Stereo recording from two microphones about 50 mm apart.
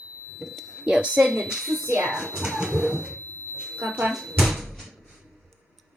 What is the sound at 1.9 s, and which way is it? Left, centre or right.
Speech, right.